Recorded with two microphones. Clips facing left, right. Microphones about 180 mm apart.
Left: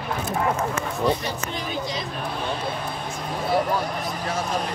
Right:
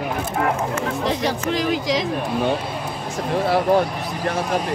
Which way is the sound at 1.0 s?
90° right.